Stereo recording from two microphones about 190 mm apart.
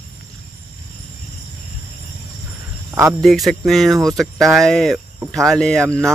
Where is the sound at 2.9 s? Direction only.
15° right (ahead or behind).